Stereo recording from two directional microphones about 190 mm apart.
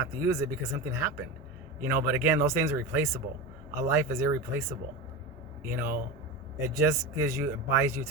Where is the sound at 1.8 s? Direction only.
10° right (ahead or behind).